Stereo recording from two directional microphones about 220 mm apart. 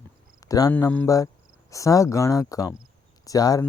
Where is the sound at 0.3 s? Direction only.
15° left (ahead or behind).